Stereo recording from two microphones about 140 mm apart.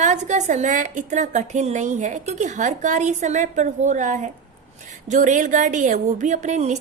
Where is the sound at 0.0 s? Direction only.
55° right (ahead or behind).